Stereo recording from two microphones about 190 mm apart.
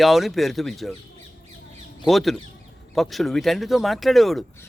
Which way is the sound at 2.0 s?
Centre (ahead or behind).